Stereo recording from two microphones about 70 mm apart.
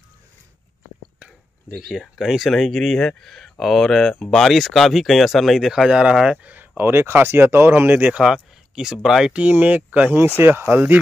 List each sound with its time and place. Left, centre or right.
1.8 s speech: centre; by 6.7 s right
6.8 s speech: right
8.2 s speech: centre
9.3 s speech: centre
10.1 s speech: right